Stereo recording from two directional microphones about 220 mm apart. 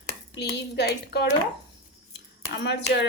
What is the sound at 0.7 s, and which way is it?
Speech, 50° left (ahead or behind).